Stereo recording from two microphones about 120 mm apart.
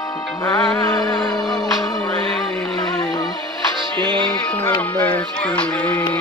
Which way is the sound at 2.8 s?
35° left (ahead or behind).